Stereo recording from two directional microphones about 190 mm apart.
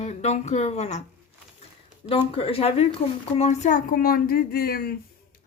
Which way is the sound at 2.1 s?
30° left (ahead or behind).